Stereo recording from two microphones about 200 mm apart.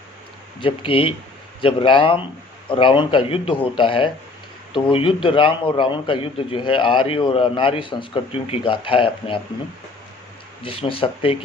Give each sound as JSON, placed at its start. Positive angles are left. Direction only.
{"t": 0.6, "sound": "a man's voice", "side_deg": 25}
{"t": 10.6, "sound": "a man's voice", "side_deg": 25}